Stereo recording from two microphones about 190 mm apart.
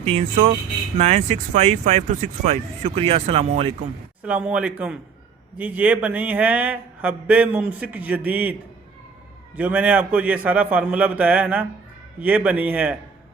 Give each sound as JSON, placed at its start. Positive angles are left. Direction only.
{"t": 0.0, "sound": "speech", "side_deg": -35}
{"t": 4.2, "sound": "speech", "side_deg": -5}
{"t": 9.6, "sound": "speech", "side_deg": -10}